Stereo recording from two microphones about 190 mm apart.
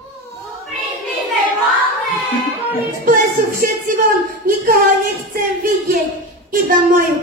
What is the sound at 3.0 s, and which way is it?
Music, 45° right (ahead or behind).